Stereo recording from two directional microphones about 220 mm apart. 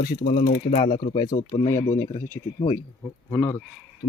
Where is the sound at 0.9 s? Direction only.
20° left (ahead or behind).